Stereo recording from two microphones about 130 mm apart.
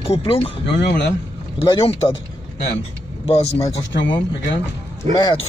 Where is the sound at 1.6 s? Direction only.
45° left (ahead or behind).